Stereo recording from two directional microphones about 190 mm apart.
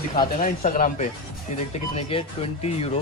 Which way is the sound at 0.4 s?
40° left (ahead or behind).